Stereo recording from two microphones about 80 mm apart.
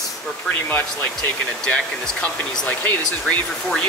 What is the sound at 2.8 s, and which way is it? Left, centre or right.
Speech, centre.